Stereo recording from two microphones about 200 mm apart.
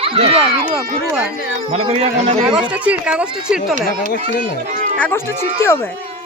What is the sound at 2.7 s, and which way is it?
Speech, 5° right (ahead or behind).